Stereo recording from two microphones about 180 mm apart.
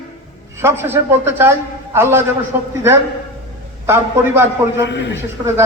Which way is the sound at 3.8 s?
15° right (ahead or behind).